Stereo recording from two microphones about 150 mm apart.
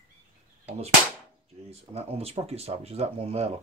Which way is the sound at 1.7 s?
45° right (ahead or behind).